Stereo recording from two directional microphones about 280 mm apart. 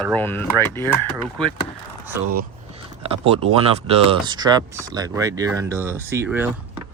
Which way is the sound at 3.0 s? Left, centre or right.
Right.